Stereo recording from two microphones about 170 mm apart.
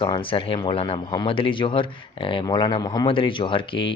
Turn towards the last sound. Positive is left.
turn(degrees=30)  # may be behind; listen again after turning